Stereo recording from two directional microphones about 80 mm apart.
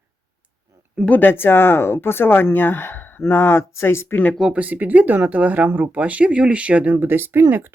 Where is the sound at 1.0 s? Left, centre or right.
Left.